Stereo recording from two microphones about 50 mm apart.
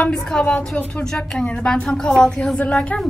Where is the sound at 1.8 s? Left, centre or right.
Centre.